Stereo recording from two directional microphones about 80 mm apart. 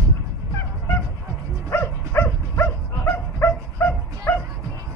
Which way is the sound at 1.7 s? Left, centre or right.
Left.